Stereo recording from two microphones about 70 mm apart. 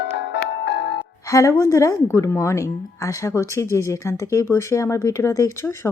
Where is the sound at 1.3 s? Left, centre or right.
Left.